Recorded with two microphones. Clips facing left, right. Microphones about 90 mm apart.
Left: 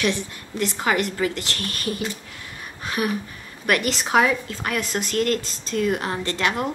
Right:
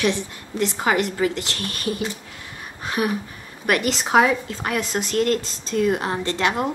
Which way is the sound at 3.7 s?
20° right (ahead or behind).